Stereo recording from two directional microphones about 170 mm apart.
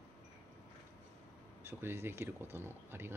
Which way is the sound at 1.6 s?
15° right (ahead or behind).